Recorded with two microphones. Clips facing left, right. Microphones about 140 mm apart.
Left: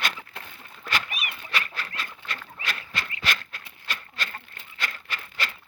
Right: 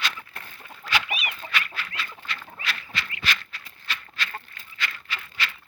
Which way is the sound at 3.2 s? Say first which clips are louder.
Even; 50° left (ahead or behind).